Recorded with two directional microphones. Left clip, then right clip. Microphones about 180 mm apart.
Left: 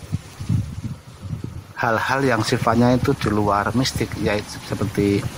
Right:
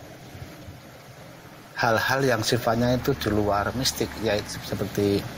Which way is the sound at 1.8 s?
10° left (ahead or behind).